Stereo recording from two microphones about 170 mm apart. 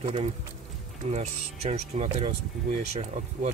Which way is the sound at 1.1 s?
40° right (ahead or behind).